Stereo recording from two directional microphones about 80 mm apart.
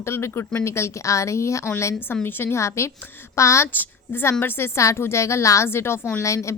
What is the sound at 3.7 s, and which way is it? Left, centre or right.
A woman's voice, left.